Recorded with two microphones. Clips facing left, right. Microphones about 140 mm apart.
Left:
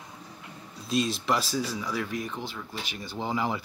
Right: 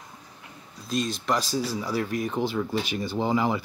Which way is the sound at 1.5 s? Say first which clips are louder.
Right 3 dB; 35° right (ahead or behind).